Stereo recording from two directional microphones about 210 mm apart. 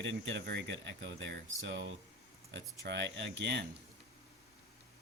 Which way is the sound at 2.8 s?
55° right (ahead or behind).